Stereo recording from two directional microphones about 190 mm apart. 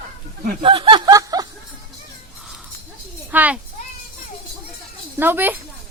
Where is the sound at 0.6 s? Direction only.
25° right (ahead or behind).